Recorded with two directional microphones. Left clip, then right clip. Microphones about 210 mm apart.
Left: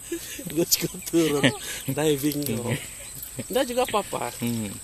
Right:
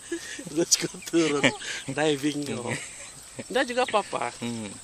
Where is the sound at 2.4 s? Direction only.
10° left (ahead or behind).